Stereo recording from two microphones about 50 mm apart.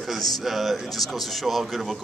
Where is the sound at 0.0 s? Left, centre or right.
Centre.